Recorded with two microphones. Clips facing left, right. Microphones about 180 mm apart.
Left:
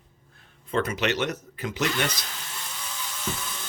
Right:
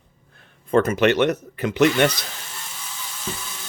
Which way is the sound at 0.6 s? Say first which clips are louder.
Right 8 dB; 50° right (ahead or behind).